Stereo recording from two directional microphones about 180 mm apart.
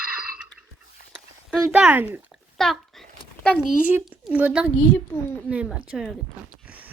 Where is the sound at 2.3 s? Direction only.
Centre (ahead or behind).